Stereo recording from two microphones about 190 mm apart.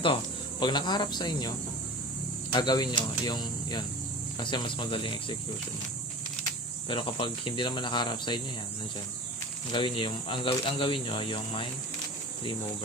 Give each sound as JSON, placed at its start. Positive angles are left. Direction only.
{"t": 0.6, "sound": "speech", "side_deg": 25}
{"t": 6.8, "sound": "speech", "side_deg": 25}
{"t": 9.7, "sound": "speech", "side_deg": 25}